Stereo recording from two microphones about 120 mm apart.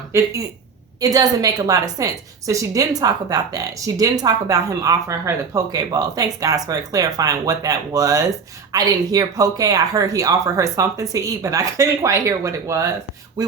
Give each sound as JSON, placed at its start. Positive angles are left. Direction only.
{"t": 1.0, "sound": "a woman's voice", "side_deg": -30}